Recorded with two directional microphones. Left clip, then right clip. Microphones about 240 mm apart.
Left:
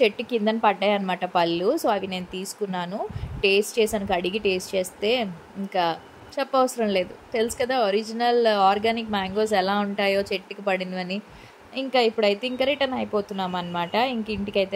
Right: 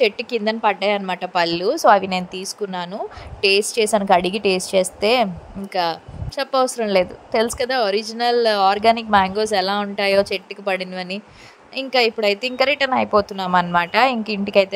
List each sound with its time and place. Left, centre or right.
0.0 s speech: centre